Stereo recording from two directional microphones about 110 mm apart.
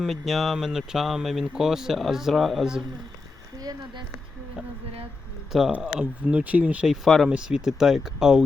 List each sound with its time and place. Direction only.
0.0 s speech: centre (ahead or behind)
3.6 s a sound: 35° right (ahead or behind)
5.5 s speech: 5° right (ahead or behind)